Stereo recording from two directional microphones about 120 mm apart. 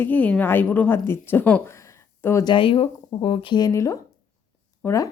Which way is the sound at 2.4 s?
45° left (ahead or behind).